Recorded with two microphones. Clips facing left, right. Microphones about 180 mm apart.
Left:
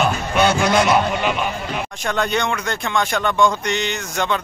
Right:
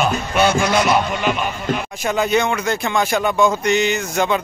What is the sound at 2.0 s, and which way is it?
Speech, 5° right (ahead or behind).